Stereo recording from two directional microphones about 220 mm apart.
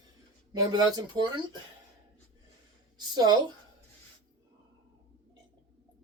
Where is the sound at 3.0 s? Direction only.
20° right (ahead or behind).